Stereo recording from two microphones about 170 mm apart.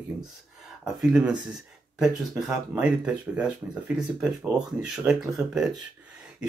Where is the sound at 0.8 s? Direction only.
5° right (ahead or behind).